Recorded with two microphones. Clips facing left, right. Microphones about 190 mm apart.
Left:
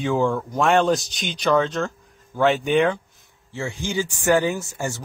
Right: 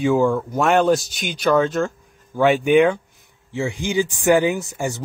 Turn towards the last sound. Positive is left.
turn(degrees=-20)  # may be behind; listen again after turning